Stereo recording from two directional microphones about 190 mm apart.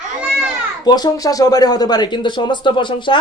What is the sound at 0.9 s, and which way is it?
Speech, 20° left (ahead or behind).